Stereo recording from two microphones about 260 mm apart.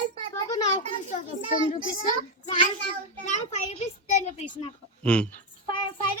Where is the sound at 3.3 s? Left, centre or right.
Left.